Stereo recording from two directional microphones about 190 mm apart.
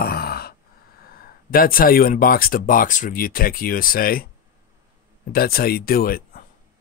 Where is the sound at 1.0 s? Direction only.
50° left (ahead or behind).